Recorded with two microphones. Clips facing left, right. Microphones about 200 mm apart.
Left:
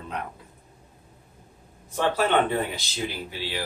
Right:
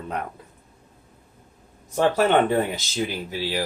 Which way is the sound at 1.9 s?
45° right (ahead or behind).